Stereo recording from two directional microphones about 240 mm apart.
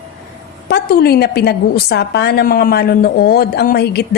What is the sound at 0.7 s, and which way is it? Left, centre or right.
A woman's voice, left.